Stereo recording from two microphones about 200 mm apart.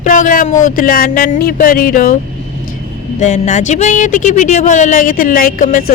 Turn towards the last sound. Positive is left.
turn(degrees=45)  # may be behind; listen again after turning